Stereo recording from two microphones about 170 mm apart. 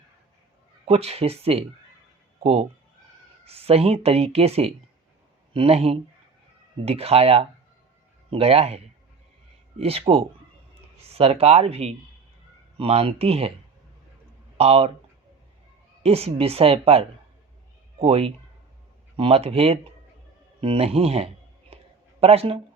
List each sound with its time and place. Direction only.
0.9 s speech: 35° right (ahead or behind)
14.6 s speech: 35° right (ahead or behind)
16.0 s speech: 35° right (ahead or behind)
21.7 s a sound: 35° right (ahead or behind)
22.2 s speech: 35° right (ahead or behind)